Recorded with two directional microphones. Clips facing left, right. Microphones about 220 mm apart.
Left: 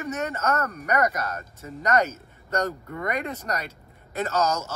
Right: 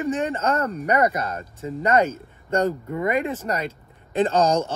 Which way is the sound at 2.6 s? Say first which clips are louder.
Right 6 dB; 15° right (ahead or behind).